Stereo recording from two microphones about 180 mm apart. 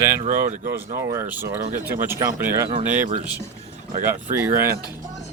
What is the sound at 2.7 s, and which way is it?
Speech, 30° right (ahead or behind).